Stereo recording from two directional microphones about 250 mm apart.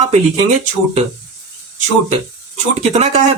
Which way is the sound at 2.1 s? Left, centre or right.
Right.